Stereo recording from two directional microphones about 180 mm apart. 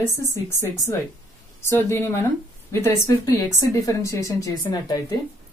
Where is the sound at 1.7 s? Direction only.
15° left (ahead or behind).